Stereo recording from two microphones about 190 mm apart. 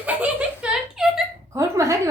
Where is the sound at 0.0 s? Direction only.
10° right (ahead or behind).